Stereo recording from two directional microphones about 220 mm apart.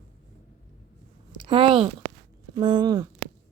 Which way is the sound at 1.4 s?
20° right (ahead or behind).